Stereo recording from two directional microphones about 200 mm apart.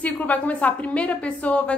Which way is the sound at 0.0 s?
10° left (ahead or behind).